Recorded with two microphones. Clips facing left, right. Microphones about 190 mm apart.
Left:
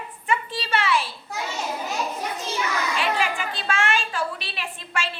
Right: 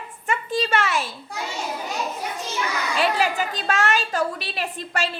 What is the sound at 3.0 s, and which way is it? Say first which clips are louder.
A woman's voice: right 6 dB; 40° right (ahead or behind).